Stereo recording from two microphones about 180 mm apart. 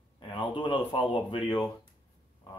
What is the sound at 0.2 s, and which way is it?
A man's voice, 25° left (ahead or behind).